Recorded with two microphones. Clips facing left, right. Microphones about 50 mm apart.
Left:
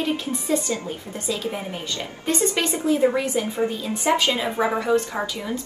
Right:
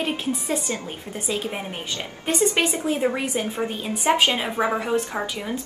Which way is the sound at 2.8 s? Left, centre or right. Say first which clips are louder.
Left 3 dB; right.